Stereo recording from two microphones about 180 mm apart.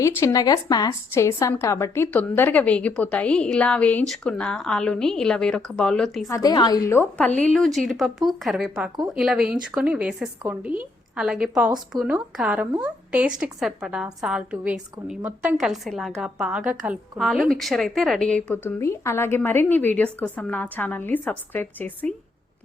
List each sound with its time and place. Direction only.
0.0 s speech: 15° left (ahead or behind)
6.2 s a woman's voice: 20° left (ahead or behind)